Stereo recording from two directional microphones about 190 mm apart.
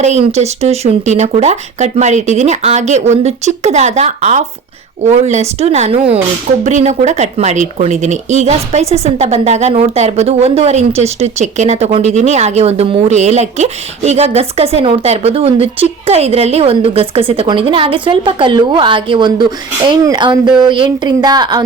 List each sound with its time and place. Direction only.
0.0 s speech: 35° right (ahead or behind)